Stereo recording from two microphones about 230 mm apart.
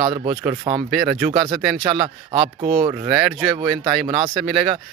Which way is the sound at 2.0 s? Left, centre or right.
Right.